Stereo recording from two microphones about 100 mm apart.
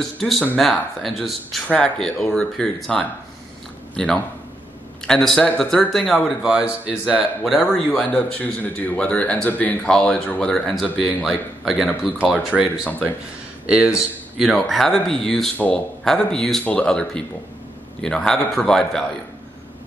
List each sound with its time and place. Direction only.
0.6 s speech: centre (ahead or behind)
8.0 s speech: 10° left (ahead or behind)
10.5 s speech: 5° left (ahead or behind)
13.7 s speech: 10° right (ahead or behind)
15.5 s speech: 15° left (ahead or behind)
16.0 s speech: 5° left (ahead or behind)